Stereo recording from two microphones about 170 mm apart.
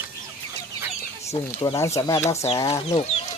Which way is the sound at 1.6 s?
25° left (ahead or behind).